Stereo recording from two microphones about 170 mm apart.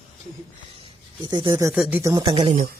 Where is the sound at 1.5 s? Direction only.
15° right (ahead or behind).